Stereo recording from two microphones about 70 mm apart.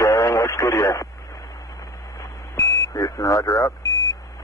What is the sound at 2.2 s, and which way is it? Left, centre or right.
Buzzer, left.